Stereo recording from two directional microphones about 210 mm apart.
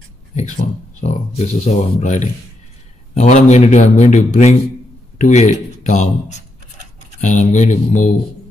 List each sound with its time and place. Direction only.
0.4 s speech: 35° left (ahead or behind)